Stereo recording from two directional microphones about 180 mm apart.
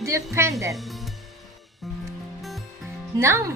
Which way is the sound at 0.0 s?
15° right (ahead or behind).